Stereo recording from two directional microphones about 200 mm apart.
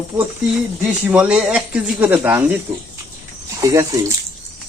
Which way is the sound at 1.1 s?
5° right (ahead or behind).